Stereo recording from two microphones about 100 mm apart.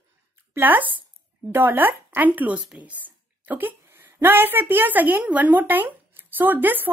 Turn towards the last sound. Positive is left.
turn(degrees=-20)  # may be behind; listen again after turning